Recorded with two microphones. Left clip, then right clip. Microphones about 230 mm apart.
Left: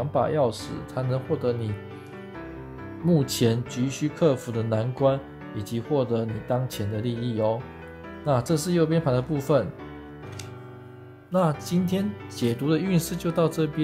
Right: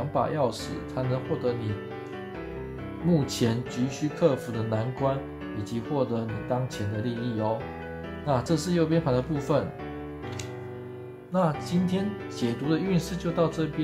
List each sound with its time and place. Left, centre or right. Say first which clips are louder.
0.1 s speech: left 3 dB; left
3.1 s speech: left 3 dB; left
11.3 s speech: left 2 dB; left